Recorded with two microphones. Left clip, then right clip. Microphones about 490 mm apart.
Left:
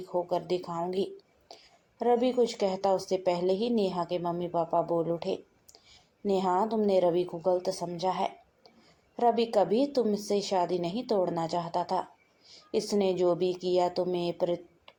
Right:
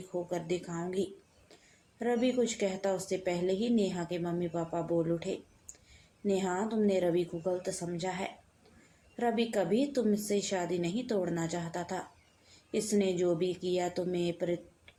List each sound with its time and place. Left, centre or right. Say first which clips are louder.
0.1 s speech: left 5 dB; right
6.2 s speech: left 5 dB; right